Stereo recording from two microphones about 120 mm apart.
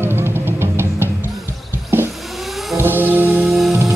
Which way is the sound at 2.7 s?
15° right (ahead or behind).